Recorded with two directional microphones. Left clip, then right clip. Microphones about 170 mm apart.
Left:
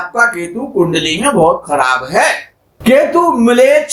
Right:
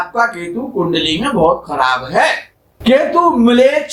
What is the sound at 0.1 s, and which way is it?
A man's voice, 45° left (ahead or behind).